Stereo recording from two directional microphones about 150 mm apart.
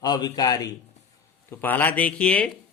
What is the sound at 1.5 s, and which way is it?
Speech, 15° left (ahead or behind).